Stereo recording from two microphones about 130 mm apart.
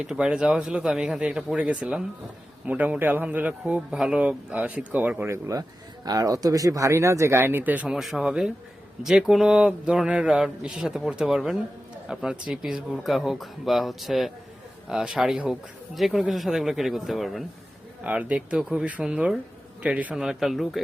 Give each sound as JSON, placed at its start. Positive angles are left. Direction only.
{"t": 0.0, "sound": "a man's voice", "side_deg": -5}